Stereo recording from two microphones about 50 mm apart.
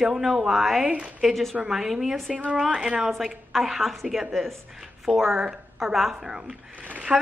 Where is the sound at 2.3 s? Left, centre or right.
Right.